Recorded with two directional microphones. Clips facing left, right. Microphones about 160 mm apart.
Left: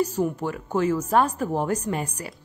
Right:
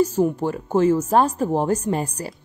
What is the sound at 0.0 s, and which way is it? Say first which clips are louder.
Speech: right 5 dB; 25° right (ahead or behind).